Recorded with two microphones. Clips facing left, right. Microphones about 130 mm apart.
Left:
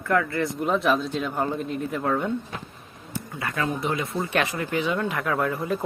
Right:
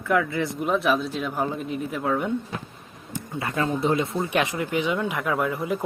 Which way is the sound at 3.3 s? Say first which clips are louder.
Right 2 dB; 25° right (ahead or behind).